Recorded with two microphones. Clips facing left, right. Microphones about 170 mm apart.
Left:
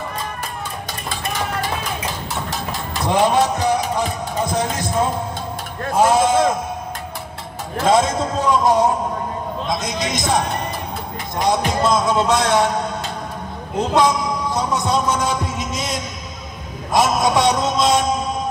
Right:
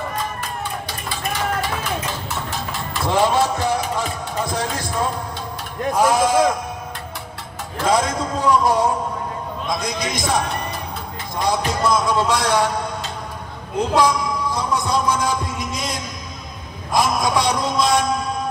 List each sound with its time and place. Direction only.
3.1 s music: 20° left (ahead or behind)
4.5 s heart sounds: 20° left (ahead or behind)
5.9 s a man's voice: 25° left (ahead or behind)
7.8 s a man's voice: 25° left (ahead or behind)
16.9 s a sound: 20° left (ahead or behind)